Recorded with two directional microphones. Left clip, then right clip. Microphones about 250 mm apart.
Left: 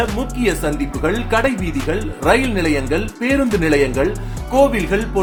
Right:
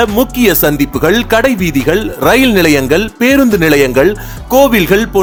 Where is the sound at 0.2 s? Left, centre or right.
Right.